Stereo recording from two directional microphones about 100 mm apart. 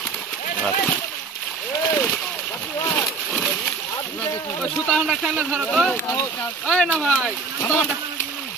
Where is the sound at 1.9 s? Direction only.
15° left (ahead or behind).